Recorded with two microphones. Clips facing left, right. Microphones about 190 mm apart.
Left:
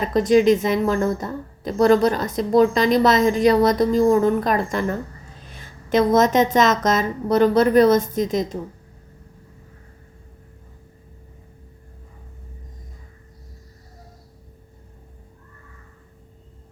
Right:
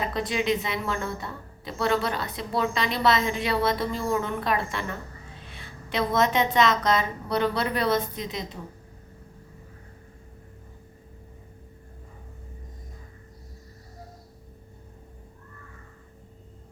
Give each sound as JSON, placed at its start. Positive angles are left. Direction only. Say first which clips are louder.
{"t": 0.1, "sound": "a woman's voice", "louder": "left 11 dB", "side_deg": 40}